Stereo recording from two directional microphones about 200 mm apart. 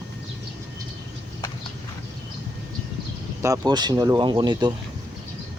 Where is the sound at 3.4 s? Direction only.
15° right (ahead or behind).